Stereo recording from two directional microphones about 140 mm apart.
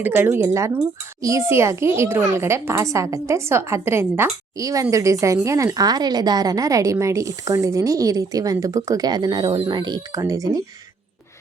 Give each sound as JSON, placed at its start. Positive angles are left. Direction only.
{"t": 0.0, "sound": "a child's voice", "side_deg": -15}